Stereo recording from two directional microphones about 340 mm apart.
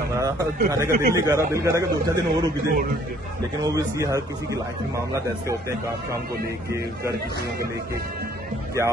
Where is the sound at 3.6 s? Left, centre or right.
Centre.